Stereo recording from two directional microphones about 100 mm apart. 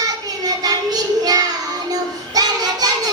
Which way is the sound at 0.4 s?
40° right (ahead or behind).